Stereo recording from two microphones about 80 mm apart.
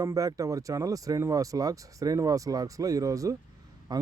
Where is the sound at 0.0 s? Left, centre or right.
Right.